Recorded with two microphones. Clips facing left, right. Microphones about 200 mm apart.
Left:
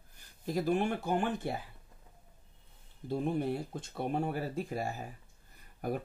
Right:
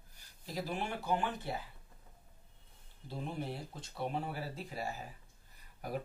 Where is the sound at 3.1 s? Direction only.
50° left (ahead or behind).